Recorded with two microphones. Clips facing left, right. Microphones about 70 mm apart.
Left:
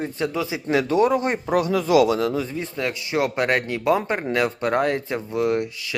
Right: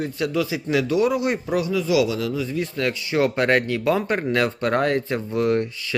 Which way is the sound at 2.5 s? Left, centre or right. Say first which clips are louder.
Right 2 dB; centre.